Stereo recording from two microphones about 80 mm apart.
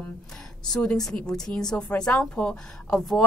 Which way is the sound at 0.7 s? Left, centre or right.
Centre.